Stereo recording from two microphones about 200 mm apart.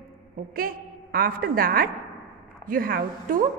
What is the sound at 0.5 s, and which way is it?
A woman's voice, 45° right (ahead or behind).